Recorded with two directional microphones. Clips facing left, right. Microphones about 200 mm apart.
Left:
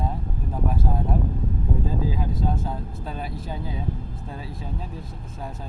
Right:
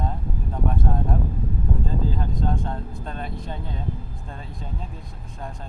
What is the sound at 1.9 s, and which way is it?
Speech, 5° left (ahead or behind).